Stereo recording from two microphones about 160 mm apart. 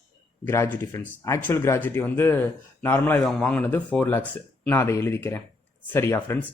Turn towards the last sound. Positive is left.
turn(degrees=15)  # may be behind; listen again after turning